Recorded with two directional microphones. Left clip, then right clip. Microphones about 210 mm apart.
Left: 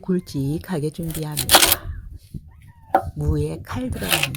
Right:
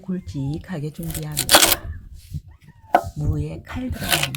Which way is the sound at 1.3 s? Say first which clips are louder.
Even; 5° right (ahead or behind).